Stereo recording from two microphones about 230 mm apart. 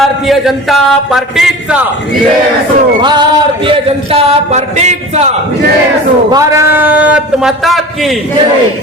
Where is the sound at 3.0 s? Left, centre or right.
Centre.